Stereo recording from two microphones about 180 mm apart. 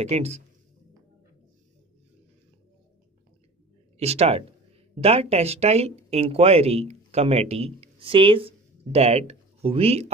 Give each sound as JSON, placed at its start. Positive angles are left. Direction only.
{"t": 0.0, "sound": "speech", "side_deg": -35}
{"t": 4.0, "sound": "speech", "side_deg": -35}